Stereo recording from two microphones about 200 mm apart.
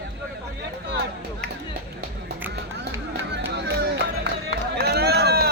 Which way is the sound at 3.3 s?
60° right (ahead or behind).